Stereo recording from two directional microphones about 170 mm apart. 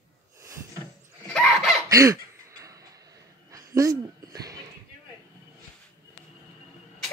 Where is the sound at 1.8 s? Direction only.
20° right (ahead or behind).